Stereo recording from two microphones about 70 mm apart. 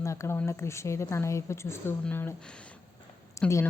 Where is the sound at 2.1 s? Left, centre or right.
Left.